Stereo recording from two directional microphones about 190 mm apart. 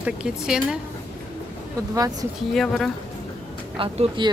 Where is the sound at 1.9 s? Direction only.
20° right (ahead or behind).